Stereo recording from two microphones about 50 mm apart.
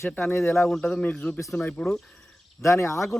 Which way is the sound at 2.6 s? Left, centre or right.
Left.